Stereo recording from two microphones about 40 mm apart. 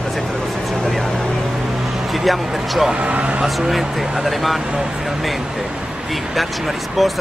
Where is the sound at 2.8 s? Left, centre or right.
Right.